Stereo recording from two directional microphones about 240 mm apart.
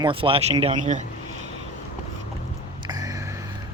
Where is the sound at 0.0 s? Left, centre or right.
Right.